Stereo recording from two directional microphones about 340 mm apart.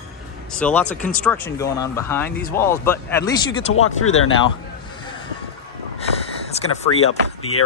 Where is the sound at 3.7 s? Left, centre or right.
Left.